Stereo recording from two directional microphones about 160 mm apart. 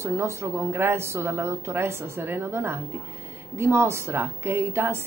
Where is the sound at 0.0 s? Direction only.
15° right (ahead or behind).